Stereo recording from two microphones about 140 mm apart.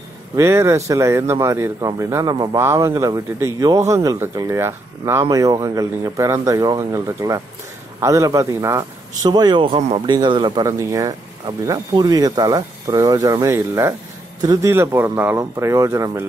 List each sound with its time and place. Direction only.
0.4 s speech: 20° right (ahead or behind)
9.8 s speech: 50° right (ahead or behind)
10.0 s speech: 35° right (ahead or behind)
14.7 s speech: 15° right (ahead or behind)